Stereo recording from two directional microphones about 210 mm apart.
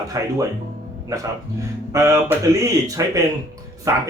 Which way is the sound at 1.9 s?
15° right (ahead or behind).